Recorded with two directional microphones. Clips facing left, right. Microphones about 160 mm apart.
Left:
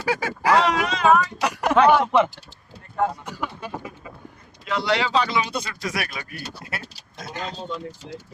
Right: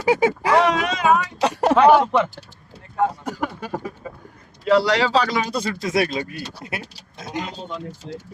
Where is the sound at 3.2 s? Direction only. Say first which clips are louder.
Right 5 dB; 45° right (ahead or behind).